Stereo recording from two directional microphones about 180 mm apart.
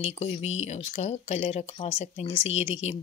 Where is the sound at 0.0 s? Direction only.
35° left (ahead or behind).